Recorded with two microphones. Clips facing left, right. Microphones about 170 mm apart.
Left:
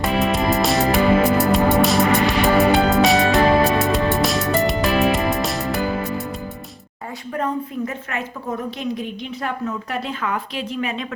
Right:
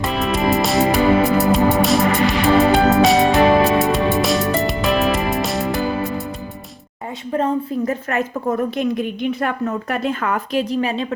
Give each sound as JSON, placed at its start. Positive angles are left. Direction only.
{"t": 0.0, "sound": "music", "side_deg": 0}
{"t": 7.3, "sound": "a sound", "side_deg": -30}
{"t": 8.8, "sound": "a woman's voice", "side_deg": -55}